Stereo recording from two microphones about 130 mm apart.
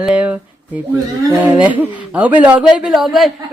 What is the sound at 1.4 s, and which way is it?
A man's voice, 10° right (ahead or behind).